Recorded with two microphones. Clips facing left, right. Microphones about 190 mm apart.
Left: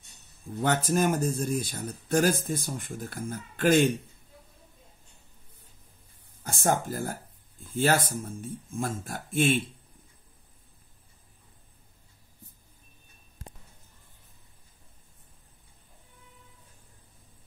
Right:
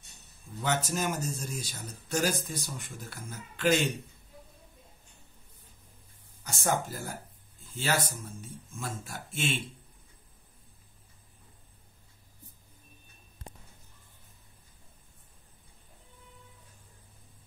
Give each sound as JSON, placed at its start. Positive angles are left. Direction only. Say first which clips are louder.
{"t": 0.6, "sound": "speech", "louder": "left 6 dB", "side_deg": 55}
{"t": 6.4, "sound": "speech", "louder": "left 3 dB", "side_deg": 50}